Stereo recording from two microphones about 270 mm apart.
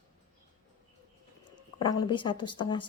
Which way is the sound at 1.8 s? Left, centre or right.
Centre.